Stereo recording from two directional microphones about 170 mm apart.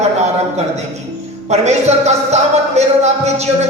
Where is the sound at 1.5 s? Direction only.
40° right (ahead or behind).